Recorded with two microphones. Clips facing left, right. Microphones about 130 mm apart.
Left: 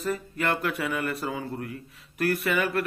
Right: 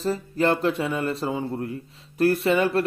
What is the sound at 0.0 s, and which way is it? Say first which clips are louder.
Speech: right 6 dB; 30° right (ahead or behind).